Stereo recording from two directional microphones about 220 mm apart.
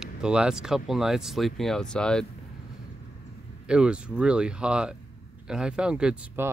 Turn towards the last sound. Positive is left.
turn(degrees=-5)  # may be behind; listen again after turning